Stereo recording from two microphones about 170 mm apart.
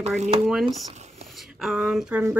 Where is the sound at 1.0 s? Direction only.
40° right (ahead or behind).